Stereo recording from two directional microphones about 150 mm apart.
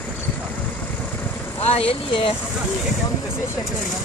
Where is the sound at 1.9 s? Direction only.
35° left (ahead or behind).